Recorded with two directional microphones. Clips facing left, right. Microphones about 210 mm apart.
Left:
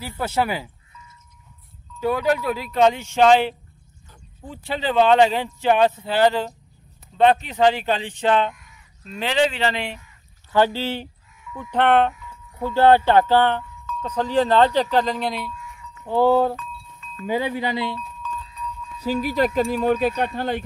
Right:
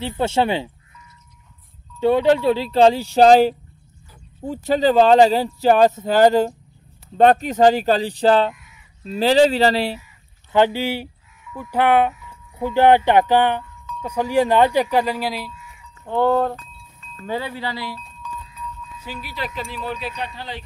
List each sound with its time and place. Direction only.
0.0 s speech: 25° right (ahead or behind)
2.0 s speech: 25° right (ahead or behind)
4.6 s speech: 40° right (ahead or behind)
8.5 s crow: centre (ahead or behind)
9.1 s speech: 35° right (ahead or behind)
10.5 s speech: 15° right (ahead or behind)
16.1 s speech: 5° left (ahead or behind)
17.3 s speech: 15° left (ahead or behind)
18.2 s a sound: 5° right (ahead or behind)
18.9 s speech: 40° left (ahead or behind)